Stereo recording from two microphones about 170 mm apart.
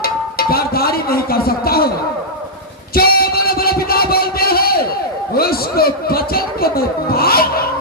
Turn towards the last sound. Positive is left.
turn(degrees=65)  # may be behind; listen again after turning